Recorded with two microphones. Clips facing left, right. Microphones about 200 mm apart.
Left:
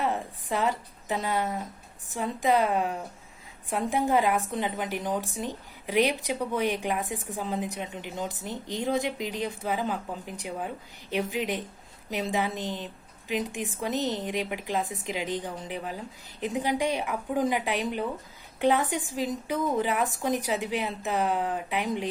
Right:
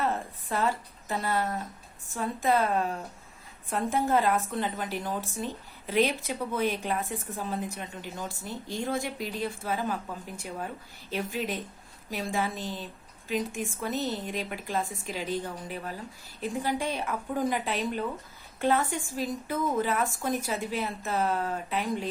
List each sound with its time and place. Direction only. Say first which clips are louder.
0.0 s a woman's voice: left 1 dB; 15° left (ahead or behind)